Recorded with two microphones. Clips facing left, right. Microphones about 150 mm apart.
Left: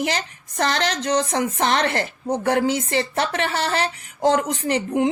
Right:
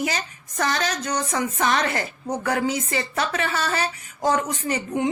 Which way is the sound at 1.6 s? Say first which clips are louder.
Left 1 dB; 60° left (ahead or behind).